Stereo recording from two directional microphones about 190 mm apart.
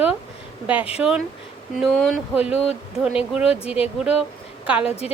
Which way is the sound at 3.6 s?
30° left (ahead or behind).